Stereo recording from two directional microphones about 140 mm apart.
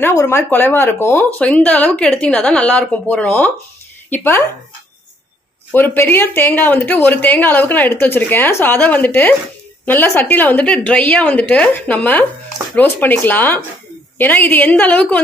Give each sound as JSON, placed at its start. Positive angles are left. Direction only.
{"t": 0.0, "sound": "speech", "side_deg": 20}
{"t": 5.7, "sound": "speech", "side_deg": 15}